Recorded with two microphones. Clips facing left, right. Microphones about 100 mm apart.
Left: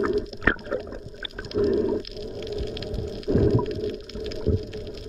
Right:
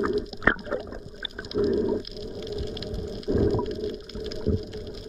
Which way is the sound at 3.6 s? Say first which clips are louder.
Left 2 dB; 25° right (ahead or behind).